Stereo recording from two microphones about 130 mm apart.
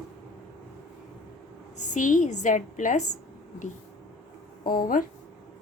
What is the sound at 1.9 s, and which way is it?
A woman's voice, 75° left (ahead or behind).